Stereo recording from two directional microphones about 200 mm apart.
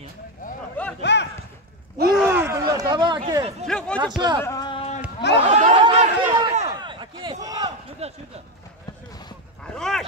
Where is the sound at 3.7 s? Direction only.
5° left (ahead or behind).